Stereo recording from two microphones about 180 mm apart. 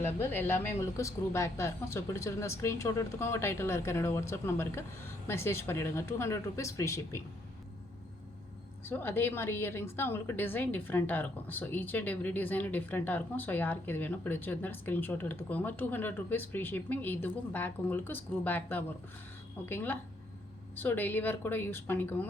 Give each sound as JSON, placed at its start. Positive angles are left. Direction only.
{"t": 0.0, "sound": "a woman's voice", "side_deg": 10}
{"t": 8.9, "sound": "a woman's voice", "side_deg": 10}